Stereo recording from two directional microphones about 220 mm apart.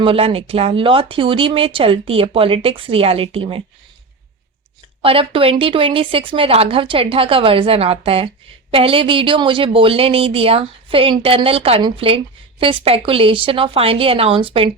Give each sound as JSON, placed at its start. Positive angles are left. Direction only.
{"t": 0.0, "sound": "speech", "side_deg": -25}
{"t": 5.0, "sound": "speech", "side_deg": -25}